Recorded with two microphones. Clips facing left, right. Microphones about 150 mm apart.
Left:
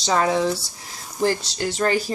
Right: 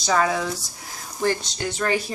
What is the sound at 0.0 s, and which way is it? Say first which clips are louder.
A woman's voice: left 2 dB; 25° left (ahead or behind).